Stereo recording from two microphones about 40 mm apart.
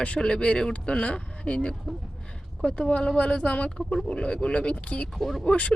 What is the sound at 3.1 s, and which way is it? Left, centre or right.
Speech, left.